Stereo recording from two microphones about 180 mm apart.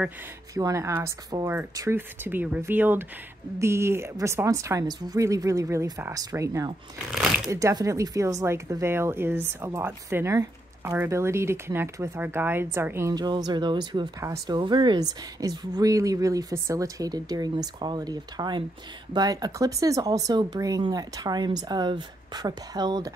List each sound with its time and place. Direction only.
0.6 s a woman's voice: 15° right (ahead or behind)